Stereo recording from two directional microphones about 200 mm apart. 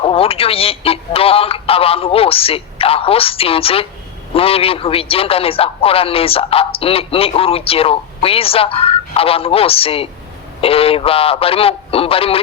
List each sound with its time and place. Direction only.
0.0 s a man's voice: 30° left (ahead or behind)